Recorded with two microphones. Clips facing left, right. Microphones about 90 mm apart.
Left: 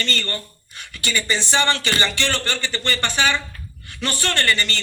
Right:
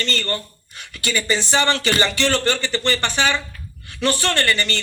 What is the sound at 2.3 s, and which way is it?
A man's voice, 20° right (ahead or behind).